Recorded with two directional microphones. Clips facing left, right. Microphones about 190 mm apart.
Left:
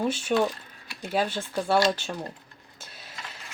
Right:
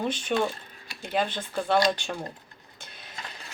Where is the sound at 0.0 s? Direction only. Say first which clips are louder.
Left 2 dB; 5° left (ahead or behind).